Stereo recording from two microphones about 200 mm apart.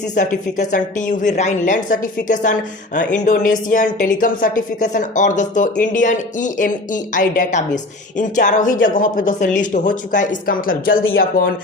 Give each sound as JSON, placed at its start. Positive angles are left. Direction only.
{"t": 0.1, "sound": "a woman's voice", "side_deg": 40}